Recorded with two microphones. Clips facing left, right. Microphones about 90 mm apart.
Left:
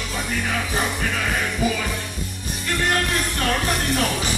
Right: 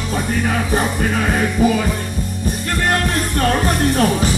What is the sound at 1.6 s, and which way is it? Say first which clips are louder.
Music: right 8 dB; 40° right (ahead or behind).